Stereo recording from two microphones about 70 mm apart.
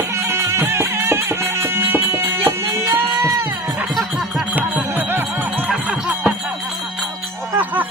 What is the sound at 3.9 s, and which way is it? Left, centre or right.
Music, centre.